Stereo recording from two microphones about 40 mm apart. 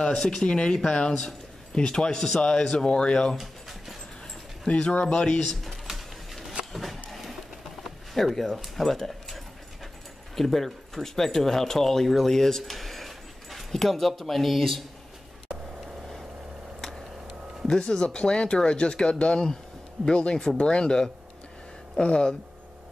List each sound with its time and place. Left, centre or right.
0.0 s speech: left
3.3 s a sound: centre
4.6 s speech: left
5.4 s a sound: centre
7.8 s speech: centre
17.6 s speech: centre